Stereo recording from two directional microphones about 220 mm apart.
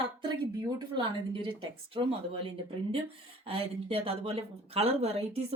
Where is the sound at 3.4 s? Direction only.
25° right (ahead or behind).